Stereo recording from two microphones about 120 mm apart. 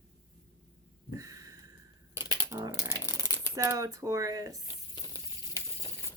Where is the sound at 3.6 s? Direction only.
30° right (ahead or behind).